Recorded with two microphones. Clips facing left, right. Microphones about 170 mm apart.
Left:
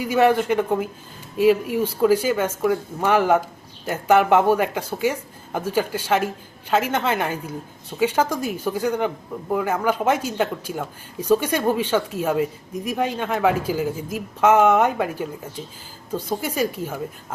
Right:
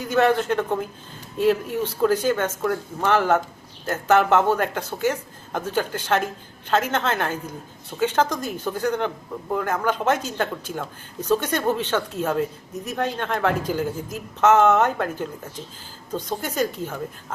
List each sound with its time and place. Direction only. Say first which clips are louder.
0.0 s speech: left 2 dB; 10° left (ahead or behind)